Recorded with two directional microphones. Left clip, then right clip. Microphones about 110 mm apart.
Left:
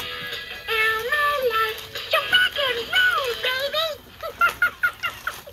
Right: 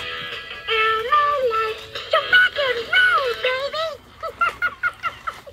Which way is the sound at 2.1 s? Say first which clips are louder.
Right 3 dB; 5° right (ahead or behind).